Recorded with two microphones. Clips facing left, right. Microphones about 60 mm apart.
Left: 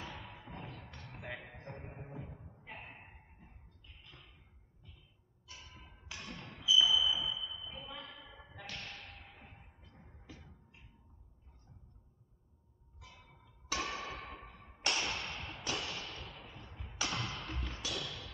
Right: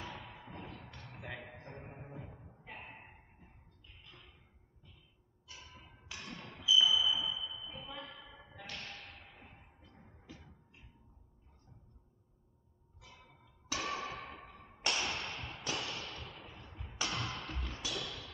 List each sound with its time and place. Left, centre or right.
0.0 s music: centre
1.6 s a sound: centre
5.6 s thump: centre
6.6 s basketball bounce: centre
13.7 s a sound: centre
16.7 s tap: centre
17.8 s music: centre